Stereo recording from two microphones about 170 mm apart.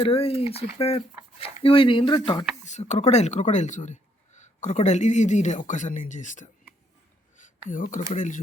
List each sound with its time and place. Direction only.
0.0 s speech: 35° left (ahead or behind)
2.6 s speech: 40° left (ahead or behind)
7.7 s speech: 50° left (ahead or behind)